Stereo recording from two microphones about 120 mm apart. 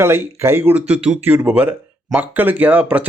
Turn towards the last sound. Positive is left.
turn(degrees=-15)  # may be behind; listen again after turning